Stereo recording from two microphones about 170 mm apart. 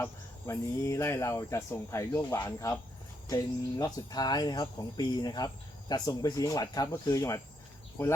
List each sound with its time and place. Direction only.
0.0 s speech: 15° left (ahead or behind)